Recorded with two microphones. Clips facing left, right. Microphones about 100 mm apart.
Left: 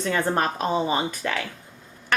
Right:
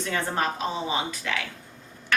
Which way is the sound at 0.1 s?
50° left (ahead or behind).